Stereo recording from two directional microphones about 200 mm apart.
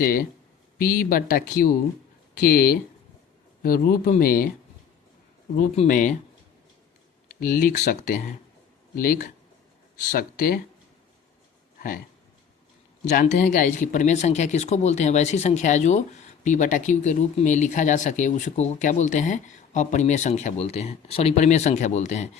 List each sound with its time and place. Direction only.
0.0 s speech: 45° left (ahead or behind)
5.5 s speech: 35° left (ahead or behind)
7.3 s speech: 40° left (ahead or behind)
13.1 s speech: 35° left (ahead or behind)